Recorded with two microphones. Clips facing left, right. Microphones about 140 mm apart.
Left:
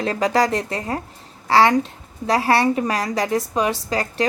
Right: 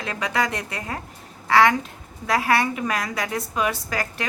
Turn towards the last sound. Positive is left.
turn(degrees=30)  # may be behind; listen again after turning